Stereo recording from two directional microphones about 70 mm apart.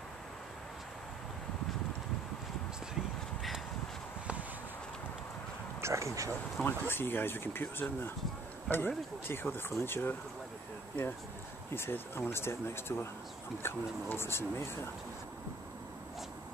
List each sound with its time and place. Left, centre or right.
5.8 s speech: right
6.6 s speech: left
11.7 s speech: left